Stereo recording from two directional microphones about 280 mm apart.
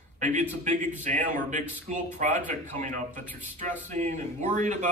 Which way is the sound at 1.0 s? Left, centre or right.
Right.